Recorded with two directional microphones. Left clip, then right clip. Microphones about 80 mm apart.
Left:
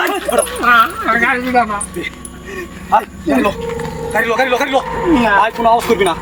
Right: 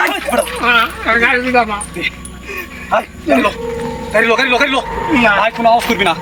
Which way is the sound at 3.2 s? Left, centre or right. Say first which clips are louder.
Right 2 dB; centre.